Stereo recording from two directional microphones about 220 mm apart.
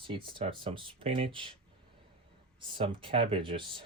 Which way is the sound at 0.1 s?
20° right (ahead or behind).